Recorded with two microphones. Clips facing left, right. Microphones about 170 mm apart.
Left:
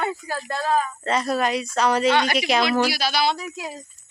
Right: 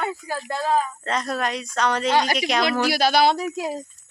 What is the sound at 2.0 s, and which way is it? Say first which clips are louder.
Speech: left 1 dB; 35° right (ahead or behind).